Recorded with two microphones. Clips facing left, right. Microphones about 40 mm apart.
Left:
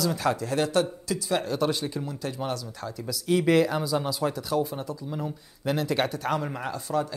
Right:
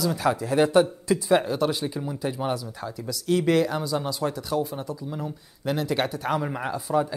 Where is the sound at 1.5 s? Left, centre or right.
Centre.